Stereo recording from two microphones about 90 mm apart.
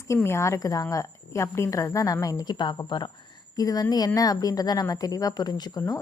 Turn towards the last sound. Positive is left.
turn(degrees=50)  # may be behind; listen again after turning